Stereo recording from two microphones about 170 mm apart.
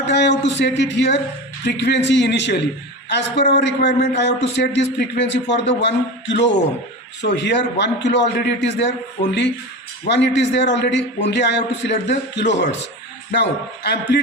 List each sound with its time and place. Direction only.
0.1 s a man's voice: 85° left